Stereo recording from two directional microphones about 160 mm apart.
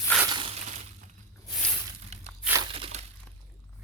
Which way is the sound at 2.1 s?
45° right (ahead or behind).